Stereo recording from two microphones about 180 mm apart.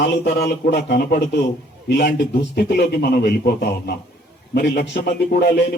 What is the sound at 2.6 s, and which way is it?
A man's voice, 60° left (ahead or behind).